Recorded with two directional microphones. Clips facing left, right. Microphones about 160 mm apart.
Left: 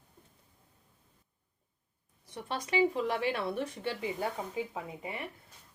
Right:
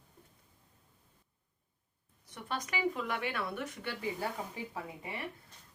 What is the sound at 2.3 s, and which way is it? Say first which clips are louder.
Speech: left 6 dB; 30° left (ahead or behind).